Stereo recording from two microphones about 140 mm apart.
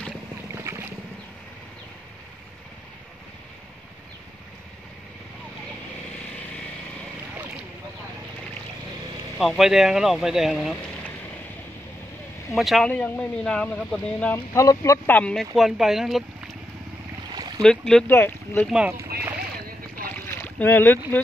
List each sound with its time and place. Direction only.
0.7 s boat: 20° right (ahead or behind)
9.4 s speech: centre (ahead or behind)
12.5 s speech: centre (ahead or behind)
12.9 s speech: 10° left (ahead or behind)
14.5 s speech: 20° left (ahead or behind)
15.5 s speech: 5° right (ahead or behind)
17.3 s boat: 30° right (ahead or behind)
17.6 s speech: 5° left (ahead or behind)
18.1 s speech: 15° left (ahead or behind)
18.7 s speech: 5° right (ahead or behind)
20.2 s boat: 15° left (ahead or behind)